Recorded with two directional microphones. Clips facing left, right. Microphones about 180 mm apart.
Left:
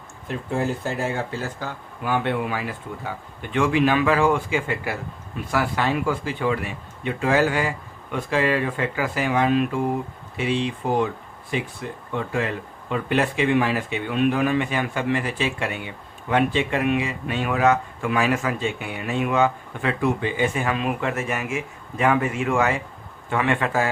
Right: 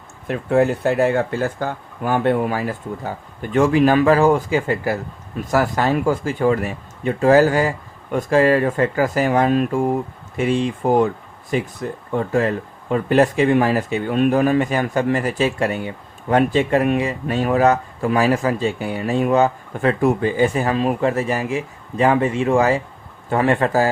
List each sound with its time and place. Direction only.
0.3 s speech: 65° right (ahead or behind); by 23.9 s 40° right (ahead or behind)